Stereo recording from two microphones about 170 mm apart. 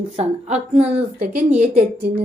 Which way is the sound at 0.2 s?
40° right (ahead or behind).